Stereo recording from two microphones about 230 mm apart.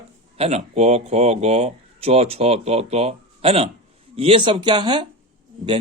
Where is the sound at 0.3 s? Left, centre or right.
Right.